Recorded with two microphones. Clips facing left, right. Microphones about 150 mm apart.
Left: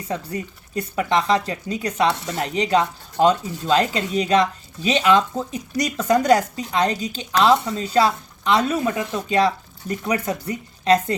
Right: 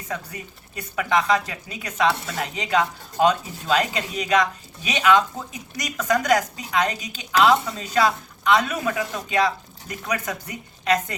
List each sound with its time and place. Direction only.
0.8 s speech: 30° left (ahead or behind)